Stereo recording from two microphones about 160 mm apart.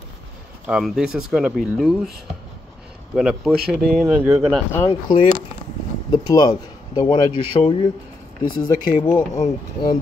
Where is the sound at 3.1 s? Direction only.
Centre (ahead or behind).